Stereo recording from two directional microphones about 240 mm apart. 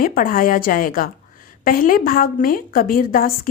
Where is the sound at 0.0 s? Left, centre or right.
Left.